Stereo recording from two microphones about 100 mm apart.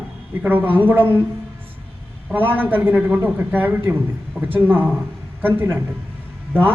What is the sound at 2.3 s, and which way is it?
A man's voice, 20° right (ahead or behind).